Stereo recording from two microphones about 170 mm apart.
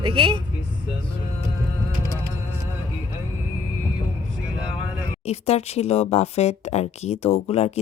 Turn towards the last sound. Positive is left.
turn(degrees=35)  # may be behind; listen again after turning